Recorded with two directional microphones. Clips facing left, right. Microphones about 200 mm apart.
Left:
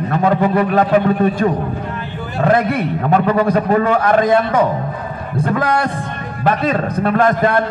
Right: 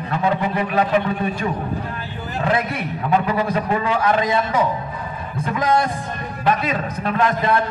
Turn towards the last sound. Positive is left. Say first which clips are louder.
# left 6 dB
turn(degrees=50)  # may be behind; listen again after turning